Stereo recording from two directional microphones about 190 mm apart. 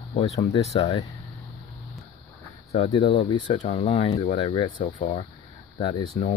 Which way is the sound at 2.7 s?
30° left (ahead or behind).